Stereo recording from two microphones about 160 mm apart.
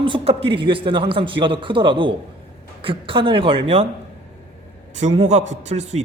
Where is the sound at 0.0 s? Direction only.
35° right (ahead or behind).